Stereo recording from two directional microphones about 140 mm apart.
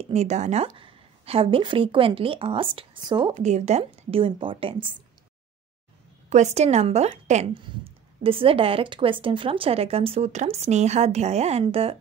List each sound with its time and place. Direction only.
0.0 s a woman's voice: 50° right (ahead or behind); by 3.3 s 35° right (ahead or behind)
3.3 s speech: 55° right (ahead or behind); by 4.7 s 40° right (ahead or behind)
6.3 s speech: 55° right (ahead or behind)
7.5 s speech: 40° right (ahead or behind)